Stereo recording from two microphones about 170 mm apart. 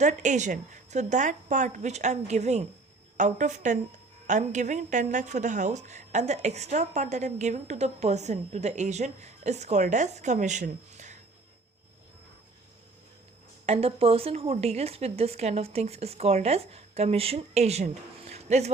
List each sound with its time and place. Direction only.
0.0 s speech: 45° right (ahead or behind)
13.7 s speech: 35° right (ahead or behind)
18.3 s a sound: 40° right (ahead or behind)